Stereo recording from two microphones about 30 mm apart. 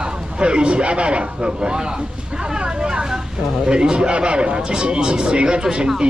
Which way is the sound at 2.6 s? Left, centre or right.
Right.